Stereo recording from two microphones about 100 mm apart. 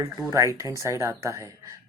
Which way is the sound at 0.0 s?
35° right (ahead or behind).